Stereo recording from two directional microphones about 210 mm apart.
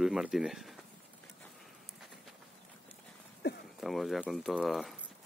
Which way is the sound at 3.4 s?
55° left (ahead or behind).